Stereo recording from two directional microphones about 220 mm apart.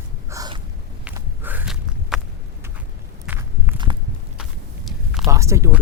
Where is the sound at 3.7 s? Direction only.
20° right (ahead or behind).